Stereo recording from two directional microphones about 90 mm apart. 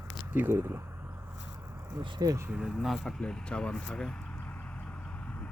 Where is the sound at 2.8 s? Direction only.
5° left (ahead or behind).